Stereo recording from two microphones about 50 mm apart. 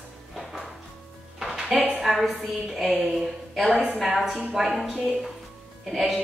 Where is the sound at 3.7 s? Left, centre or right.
Right.